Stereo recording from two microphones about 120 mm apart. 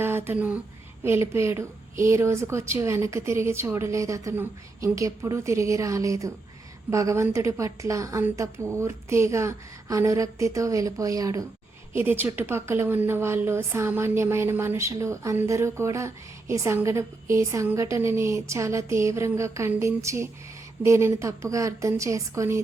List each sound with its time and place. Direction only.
0.0 s a woman's voice: 20° right (ahead or behind)
11.9 s a woman's voice: 15° right (ahead or behind)